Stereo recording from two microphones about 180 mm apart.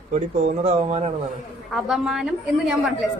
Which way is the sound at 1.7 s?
Centre (ahead or behind).